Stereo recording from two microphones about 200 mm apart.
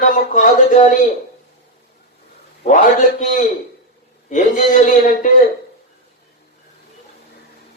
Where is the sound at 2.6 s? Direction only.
40° left (ahead or behind).